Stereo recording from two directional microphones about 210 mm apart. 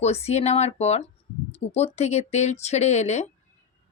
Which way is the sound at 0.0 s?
30° left (ahead or behind).